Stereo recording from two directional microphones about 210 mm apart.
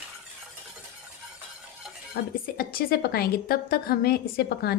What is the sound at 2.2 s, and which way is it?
A woman's voice, 45° left (ahead or behind).